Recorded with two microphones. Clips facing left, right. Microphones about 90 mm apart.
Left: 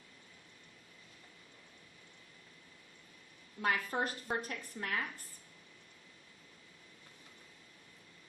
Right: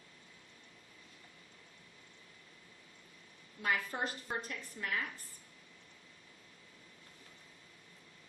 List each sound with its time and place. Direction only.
3.6 s a woman's voice: 50° left (ahead or behind)